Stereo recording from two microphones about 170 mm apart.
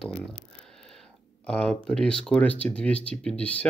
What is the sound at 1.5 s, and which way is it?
Speech, 5° left (ahead or behind).